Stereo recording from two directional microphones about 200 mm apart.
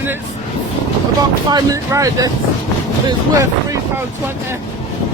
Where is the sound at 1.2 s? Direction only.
20° right (ahead or behind).